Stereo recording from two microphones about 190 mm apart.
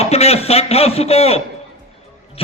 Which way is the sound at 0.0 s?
35° left (ahead or behind).